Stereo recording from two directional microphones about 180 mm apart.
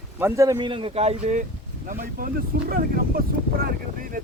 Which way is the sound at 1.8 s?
50° right (ahead or behind).